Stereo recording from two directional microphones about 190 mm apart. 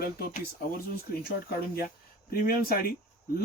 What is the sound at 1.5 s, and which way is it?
Speech, 55° left (ahead or behind).